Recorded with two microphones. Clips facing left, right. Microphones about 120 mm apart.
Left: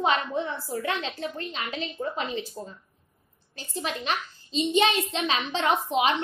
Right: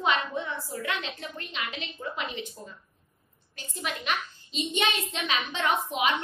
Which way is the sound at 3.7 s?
35° left (ahead or behind).